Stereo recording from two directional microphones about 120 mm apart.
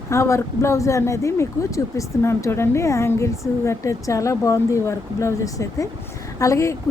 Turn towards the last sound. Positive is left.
turn(degrees=25)  # may be behind; listen again after turning